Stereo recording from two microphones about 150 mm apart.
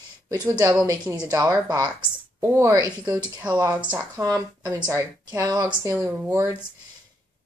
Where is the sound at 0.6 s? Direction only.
5° right (ahead or behind).